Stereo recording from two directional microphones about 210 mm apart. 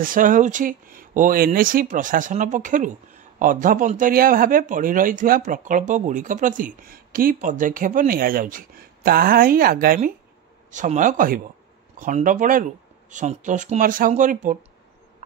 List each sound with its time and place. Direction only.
0.0 s speech: 40° right (ahead or behind)